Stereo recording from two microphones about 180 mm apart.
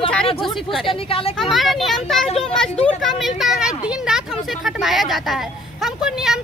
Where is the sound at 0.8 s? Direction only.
30° left (ahead or behind).